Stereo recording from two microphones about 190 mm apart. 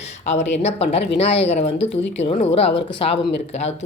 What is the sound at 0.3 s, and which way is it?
Speech, 35° left (ahead or behind).